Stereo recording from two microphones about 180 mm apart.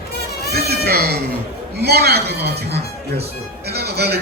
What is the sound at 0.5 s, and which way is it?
Sheep, 60° right (ahead or behind).